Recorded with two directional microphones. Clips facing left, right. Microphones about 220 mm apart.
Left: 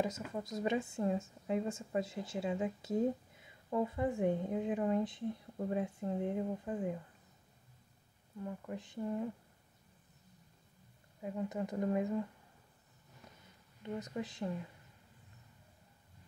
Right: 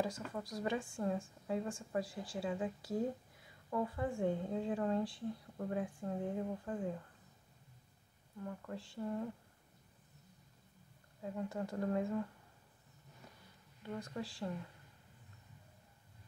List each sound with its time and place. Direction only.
0.3 s a woman's voice: 25° left (ahead or behind)
8.5 s speech: 15° left (ahead or behind)
11.2 s speech: 15° left (ahead or behind)
13.8 s a woman's voice: 20° left (ahead or behind)